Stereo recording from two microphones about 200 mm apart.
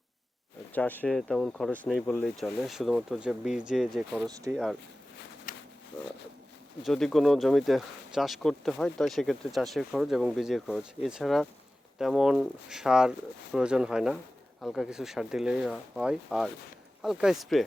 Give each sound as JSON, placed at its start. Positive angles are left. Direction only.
{"t": 0.7, "sound": "speech", "side_deg": 10}
{"t": 5.5, "sound": "a sound", "side_deg": 45}
{"t": 6.8, "sound": "speech", "side_deg": 0}